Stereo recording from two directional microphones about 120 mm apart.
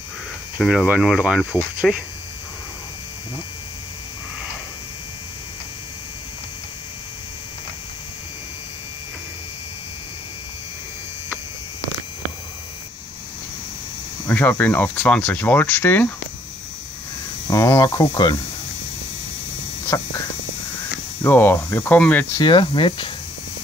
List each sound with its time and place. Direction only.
0.6 s speech: centre (ahead or behind)
14.2 s speech: 15° left (ahead or behind)
17.5 s speech: 30° left (ahead or behind)
19.9 s speech: 25° left (ahead or behind)
21.2 s speech: 20° left (ahead or behind)
22.4 s speech: 40° left (ahead or behind)